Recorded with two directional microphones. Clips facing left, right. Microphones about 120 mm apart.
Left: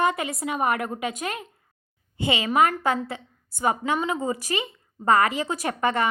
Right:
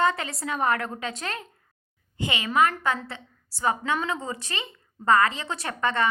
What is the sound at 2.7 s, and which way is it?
A woman's voice, 20° left (ahead or behind).